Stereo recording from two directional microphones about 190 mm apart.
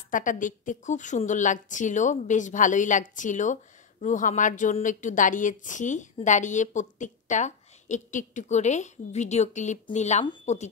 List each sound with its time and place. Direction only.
0.1 s a woman's voice: 45° left (ahead or behind)